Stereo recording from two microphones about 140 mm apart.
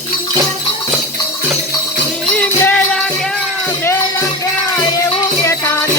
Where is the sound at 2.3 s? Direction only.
10° left (ahead or behind).